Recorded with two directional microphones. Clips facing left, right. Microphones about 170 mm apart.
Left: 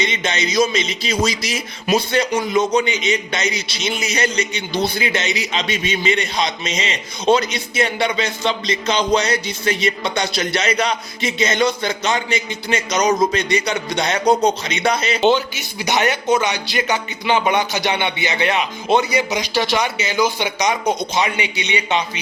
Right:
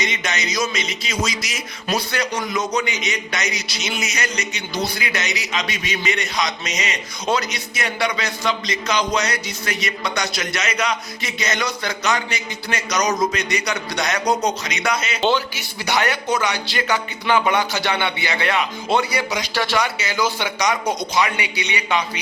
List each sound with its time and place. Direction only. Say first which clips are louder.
0.0 s speech: left 4 dB; 25° left (ahead or behind)
15.2 s speech: left 4 dB; 20° left (ahead or behind)